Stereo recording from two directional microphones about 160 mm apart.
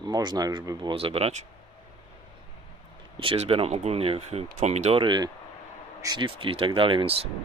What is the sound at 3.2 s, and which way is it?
Speech, 40° right (ahead or behind).